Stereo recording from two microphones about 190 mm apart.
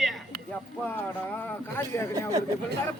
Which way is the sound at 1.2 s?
10° left (ahead or behind).